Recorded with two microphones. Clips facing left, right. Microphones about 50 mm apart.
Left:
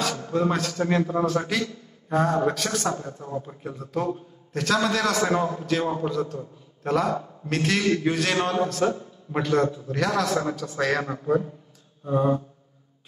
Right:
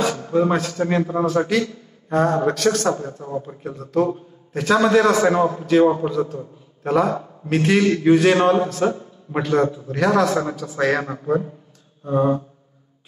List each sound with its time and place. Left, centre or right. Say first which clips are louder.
0.0 s a man's voice: right 5 dB; centre
1.2 s a man's voice: right 5 dB; centre
3.1 s speech: right 4 dB; right
3.6 s a man's voice: right 9 dB; centre
4.1 s a man's voice: right 2 dB; centre
11.0 s a man's voice: right 2 dB; centre